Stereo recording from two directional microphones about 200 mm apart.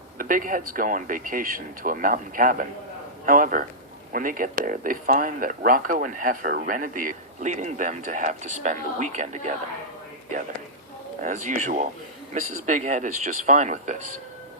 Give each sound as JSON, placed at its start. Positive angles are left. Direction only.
{"t": 0.2, "sound": "speech", "side_deg": -45}
{"t": 11.2, "sound": "speech", "side_deg": -40}